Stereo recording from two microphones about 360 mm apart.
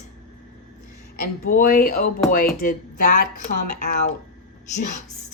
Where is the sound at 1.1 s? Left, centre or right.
Left.